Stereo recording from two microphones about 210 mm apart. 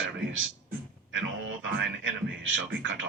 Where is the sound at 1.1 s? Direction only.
65° right (ahead or behind).